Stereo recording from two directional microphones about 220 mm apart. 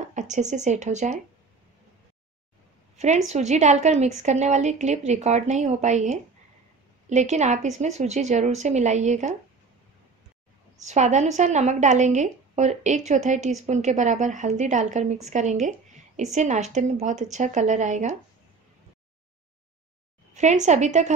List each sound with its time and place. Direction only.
0.1 s a woman's voice: 35° right (ahead or behind)
3.3 s a woman's voice: 30° right (ahead or behind)
10.8 s a woman's voice: 30° right (ahead or behind)
20.3 s a woman's voice: 35° right (ahead or behind)